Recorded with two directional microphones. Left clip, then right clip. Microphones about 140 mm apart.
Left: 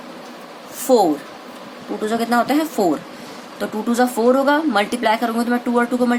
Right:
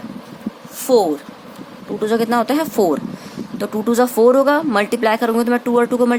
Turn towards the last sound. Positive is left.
turn(degrees=-55)  # may be behind; listen again after turning